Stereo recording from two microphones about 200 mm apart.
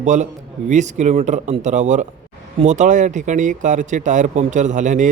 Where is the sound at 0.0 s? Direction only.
35° right (ahead or behind).